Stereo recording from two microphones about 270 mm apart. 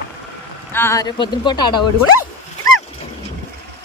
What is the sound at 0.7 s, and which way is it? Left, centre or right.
Speech, centre.